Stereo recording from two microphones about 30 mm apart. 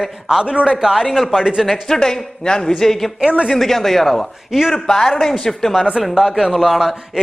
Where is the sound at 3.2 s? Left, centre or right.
Right.